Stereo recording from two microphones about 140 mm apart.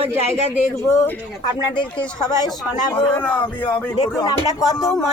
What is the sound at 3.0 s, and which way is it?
Speech, 10° left (ahead or behind).